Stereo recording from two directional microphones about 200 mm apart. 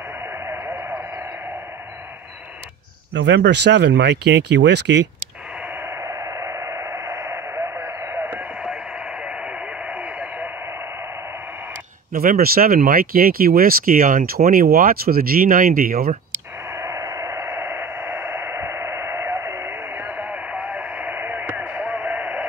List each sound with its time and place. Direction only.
0.5 s a sound: 10° right (ahead or behind)
3.1 s speech: 60° right (ahead or behind)
6.0 s radio: 15° right (ahead or behind)
9.8 s radio: 5° right (ahead or behind)
12.1 s speech: 45° right (ahead or behind)
16.7 s radio: 15° right (ahead or behind)